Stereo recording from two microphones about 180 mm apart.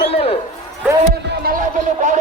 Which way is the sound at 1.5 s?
45° right (ahead or behind).